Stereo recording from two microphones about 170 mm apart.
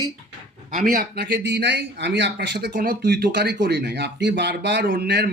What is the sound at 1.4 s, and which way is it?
Speech, 90° right.